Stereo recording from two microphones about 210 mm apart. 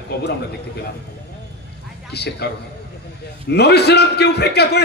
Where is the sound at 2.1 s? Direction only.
50° left (ahead or behind).